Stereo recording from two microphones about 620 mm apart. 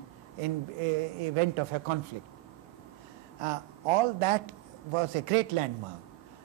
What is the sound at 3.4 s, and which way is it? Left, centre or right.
A man's voice, right.